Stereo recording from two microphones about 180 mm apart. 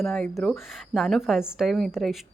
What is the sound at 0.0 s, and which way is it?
Speech, centre (ahead or behind).